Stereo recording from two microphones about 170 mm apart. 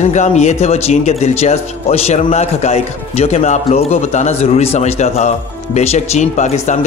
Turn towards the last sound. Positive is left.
turn(degrees=45)  # may be behind; listen again after turning